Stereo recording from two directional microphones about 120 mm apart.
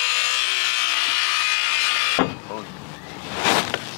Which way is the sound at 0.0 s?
15° left (ahead or behind).